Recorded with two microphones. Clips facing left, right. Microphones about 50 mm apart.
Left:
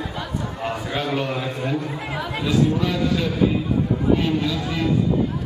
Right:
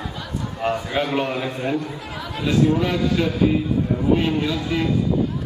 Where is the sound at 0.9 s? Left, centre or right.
Right.